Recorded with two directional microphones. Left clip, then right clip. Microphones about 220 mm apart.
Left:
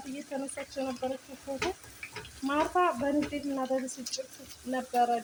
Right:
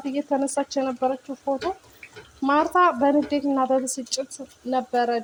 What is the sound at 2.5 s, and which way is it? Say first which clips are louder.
Speech: right 9 dB; 40° right (ahead or behind).